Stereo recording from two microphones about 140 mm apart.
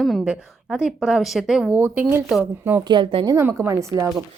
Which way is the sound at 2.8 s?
35° right (ahead or behind).